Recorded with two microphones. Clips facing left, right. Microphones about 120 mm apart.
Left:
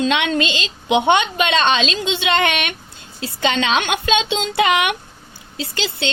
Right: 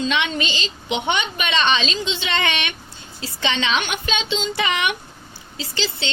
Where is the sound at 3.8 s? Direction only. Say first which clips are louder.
Left 6 dB; 65° left (ahead or behind).